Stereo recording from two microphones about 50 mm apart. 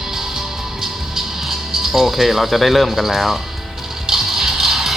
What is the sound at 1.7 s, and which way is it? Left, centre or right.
Speech, centre.